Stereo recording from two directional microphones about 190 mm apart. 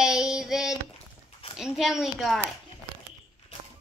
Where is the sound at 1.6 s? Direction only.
Centre (ahead or behind).